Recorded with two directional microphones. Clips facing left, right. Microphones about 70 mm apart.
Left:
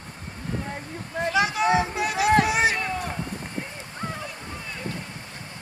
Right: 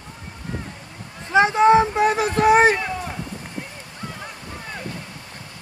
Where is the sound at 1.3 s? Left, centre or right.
Right.